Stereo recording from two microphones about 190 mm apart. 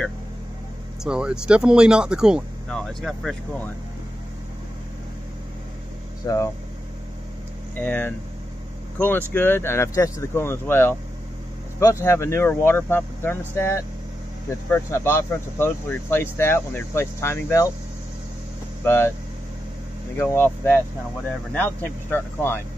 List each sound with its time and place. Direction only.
1.0 s speech: 5° right (ahead or behind)
6.2 s speech: 15° left (ahead or behind)
7.8 s speech: 10° left (ahead or behind)
18.9 s speech: 10° left (ahead or behind)
20.2 s speech: 10° left (ahead or behind)